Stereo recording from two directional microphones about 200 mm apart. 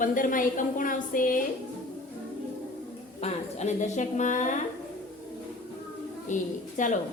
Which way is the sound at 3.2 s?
35° left (ahead or behind).